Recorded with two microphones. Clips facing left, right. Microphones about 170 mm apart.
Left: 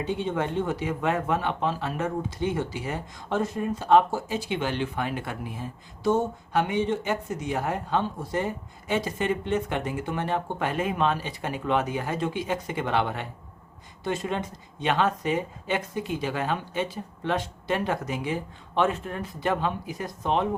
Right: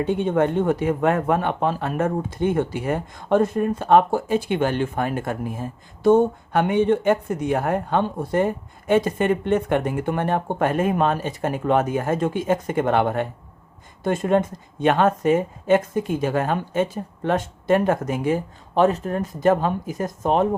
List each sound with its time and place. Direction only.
0.0 s speech: 55° right (ahead or behind)